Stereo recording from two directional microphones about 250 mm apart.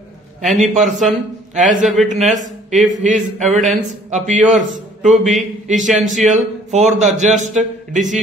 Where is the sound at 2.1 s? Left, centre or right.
Right.